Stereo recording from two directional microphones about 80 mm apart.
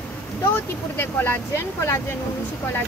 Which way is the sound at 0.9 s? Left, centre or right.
Left.